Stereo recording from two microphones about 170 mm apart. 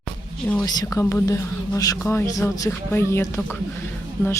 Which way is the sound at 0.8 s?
20° left (ahead or behind).